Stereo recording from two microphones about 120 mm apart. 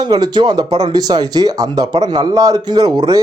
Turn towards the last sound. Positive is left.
turn(degrees=-35)  # may be behind; listen again after turning